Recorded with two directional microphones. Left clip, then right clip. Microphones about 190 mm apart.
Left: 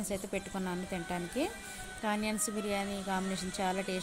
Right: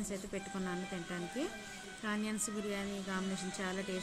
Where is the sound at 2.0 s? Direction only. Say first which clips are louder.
Left 5 dB; 25° left (ahead or behind).